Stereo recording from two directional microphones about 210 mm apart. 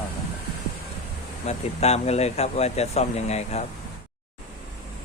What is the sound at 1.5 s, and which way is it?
Speech, 30° left (ahead or behind).